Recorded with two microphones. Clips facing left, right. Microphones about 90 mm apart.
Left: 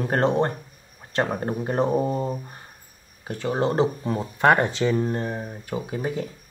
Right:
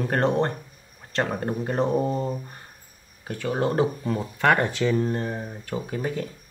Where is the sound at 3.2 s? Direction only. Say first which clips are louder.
Left 1 dB; 20° left (ahead or behind).